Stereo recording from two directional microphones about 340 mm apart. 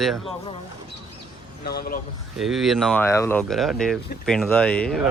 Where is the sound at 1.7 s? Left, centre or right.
Left.